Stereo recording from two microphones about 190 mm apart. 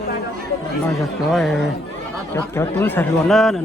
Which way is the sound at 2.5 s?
10° left (ahead or behind).